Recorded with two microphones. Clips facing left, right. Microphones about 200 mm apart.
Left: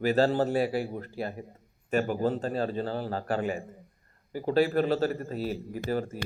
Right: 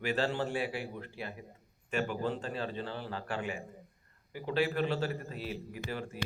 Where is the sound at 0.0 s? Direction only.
40° left (ahead or behind).